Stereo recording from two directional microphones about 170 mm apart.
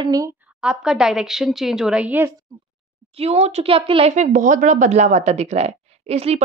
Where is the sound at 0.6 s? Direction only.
5° right (ahead or behind).